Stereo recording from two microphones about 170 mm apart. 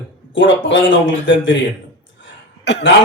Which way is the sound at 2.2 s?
90° left.